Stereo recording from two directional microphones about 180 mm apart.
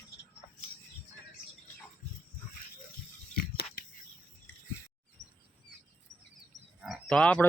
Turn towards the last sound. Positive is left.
turn(degrees=5)  # may be behind; listen again after turning